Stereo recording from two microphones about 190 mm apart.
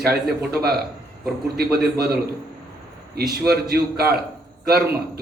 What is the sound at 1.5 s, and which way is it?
Speech, 55° right (ahead or behind).